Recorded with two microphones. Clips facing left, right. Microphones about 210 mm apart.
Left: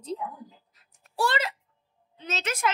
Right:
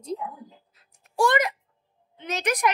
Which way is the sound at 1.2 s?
15° right (ahead or behind).